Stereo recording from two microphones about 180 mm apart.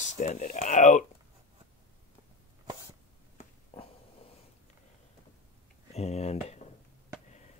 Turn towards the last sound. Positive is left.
turn(degrees=35)  # may be behind; listen again after turning